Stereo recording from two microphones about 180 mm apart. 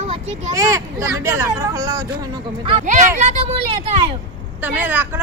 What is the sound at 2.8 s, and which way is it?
A woman's voice, 45° right (ahead or behind).